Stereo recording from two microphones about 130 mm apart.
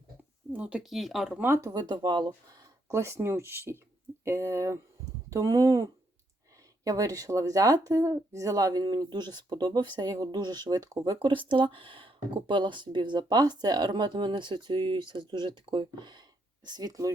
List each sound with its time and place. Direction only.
0.5 s speech: 10° right (ahead or behind)
1.4 s speech: 20° right (ahead or behind); by 2.6 s 35° right (ahead or behind)
2.9 s speech: 20° right (ahead or behind)